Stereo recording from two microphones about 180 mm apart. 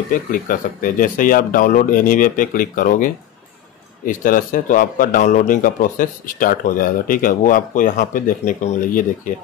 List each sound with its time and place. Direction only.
0.1 s a man's voice: 50° left (ahead or behind)